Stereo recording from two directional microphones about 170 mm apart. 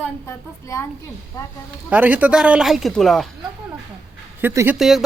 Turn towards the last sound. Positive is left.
turn(degrees=0)  # may be behind; listen again after turning